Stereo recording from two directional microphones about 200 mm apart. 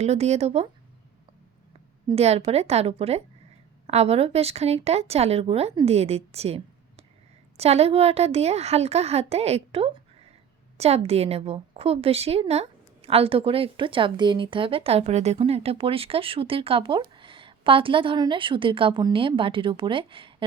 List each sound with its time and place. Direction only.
0.0 s a woman's voice: 35° right (ahead or behind)
2.0 s a woman's voice: 30° right (ahead or behind)